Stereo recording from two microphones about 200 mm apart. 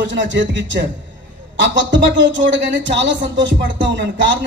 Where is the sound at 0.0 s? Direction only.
65° right (ahead or behind).